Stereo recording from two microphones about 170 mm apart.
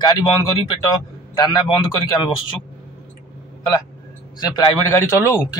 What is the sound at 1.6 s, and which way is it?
Speech, 25° left (ahead or behind).